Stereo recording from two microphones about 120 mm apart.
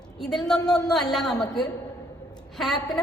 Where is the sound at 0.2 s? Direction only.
5° left (ahead or behind).